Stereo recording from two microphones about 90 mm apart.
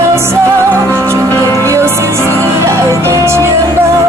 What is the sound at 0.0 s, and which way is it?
Music, 30° right (ahead or behind).